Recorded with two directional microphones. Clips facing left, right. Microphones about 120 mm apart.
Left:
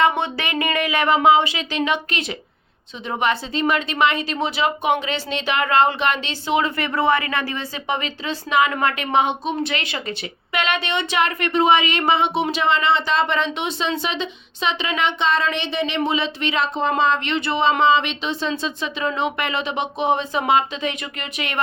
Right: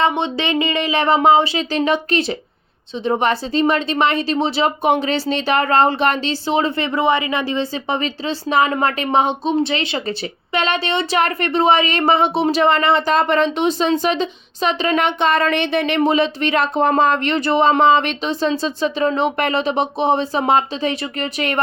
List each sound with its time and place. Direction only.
0.0 s speech: 20° right (ahead or behind); by 16.0 s 55° right (ahead or behind)
16.0 s speech: 45° right (ahead or behind)